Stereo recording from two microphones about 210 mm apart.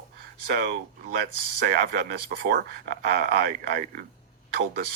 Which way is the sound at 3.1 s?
50° right (ahead or behind).